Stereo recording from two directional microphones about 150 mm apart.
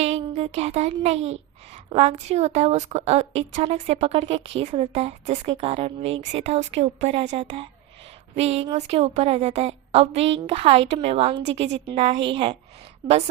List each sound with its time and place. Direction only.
0.0 s speech: 45° right (ahead or behind)